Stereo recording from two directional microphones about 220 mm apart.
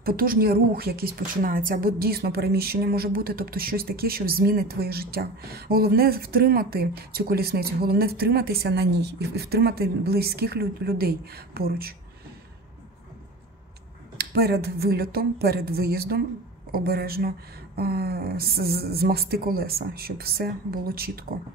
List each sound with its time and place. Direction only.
0.0 s a woman's voice: 40° right (ahead or behind)
14.1 s a woman's voice: 45° right (ahead or behind)